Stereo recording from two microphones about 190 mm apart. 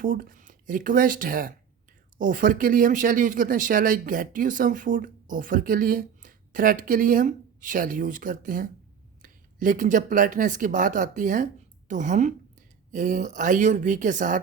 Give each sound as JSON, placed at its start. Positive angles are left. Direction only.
{"t": 0.0, "sound": "speech", "side_deg": -45}